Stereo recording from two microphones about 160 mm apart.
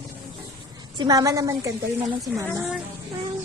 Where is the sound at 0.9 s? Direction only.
25° right (ahead or behind).